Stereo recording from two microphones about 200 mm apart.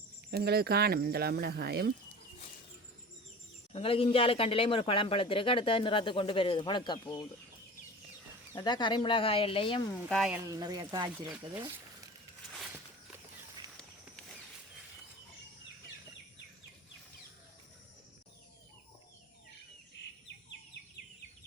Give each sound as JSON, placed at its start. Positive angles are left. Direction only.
{"t": 0.3, "sound": "speech", "side_deg": -55}
{"t": 3.7, "sound": "speech", "side_deg": 30}
{"t": 8.5, "sound": "speech", "side_deg": 20}
{"t": 10.1, "sound": "speech", "side_deg": 0}
{"t": 10.3, "sound": "speech", "side_deg": -15}